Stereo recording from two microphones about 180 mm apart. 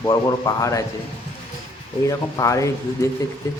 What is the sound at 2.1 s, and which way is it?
Speech, 20° left (ahead or behind).